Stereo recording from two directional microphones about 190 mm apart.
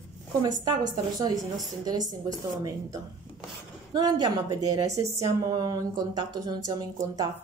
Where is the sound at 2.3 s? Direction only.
20° right (ahead or behind).